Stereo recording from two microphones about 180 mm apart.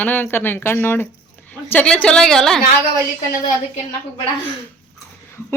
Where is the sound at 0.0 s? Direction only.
10° left (ahead or behind).